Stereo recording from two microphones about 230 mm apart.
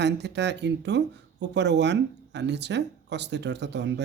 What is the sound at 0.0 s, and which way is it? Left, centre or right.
Speech, right.